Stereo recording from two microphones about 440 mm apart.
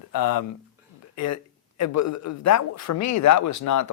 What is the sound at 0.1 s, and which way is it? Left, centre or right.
Speech, left.